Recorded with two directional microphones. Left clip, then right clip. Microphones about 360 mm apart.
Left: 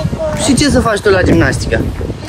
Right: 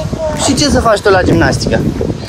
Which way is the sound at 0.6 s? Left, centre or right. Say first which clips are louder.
Right 3 dB; centre.